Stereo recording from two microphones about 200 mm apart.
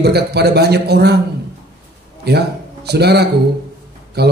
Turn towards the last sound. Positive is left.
turn(degrees=-55)  # may be behind; listen again after turning